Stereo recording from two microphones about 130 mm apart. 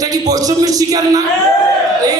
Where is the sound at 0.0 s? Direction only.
30° right (ahead or behind).